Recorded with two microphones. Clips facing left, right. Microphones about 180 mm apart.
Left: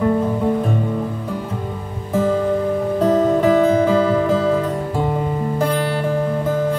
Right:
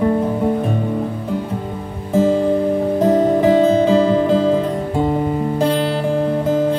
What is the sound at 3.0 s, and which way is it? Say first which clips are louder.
Music: right 1 dB; 20° right (ahead or behind).